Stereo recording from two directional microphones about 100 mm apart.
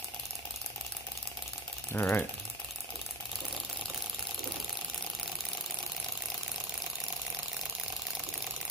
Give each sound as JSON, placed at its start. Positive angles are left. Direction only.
{"t": 1.9, "sound": "speech", "side_deg": 20}